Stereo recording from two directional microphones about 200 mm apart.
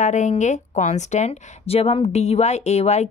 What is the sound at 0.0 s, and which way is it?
A woman's voice, 35° left (ahead or behind).